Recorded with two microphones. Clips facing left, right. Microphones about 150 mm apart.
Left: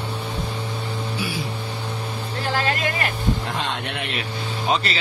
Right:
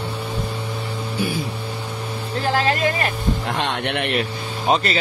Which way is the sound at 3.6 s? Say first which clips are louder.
Right 5 dB; 70° right (ahead or behind).